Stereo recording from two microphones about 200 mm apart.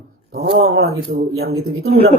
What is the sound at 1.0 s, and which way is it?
Speech, 55° right (ahead or behind).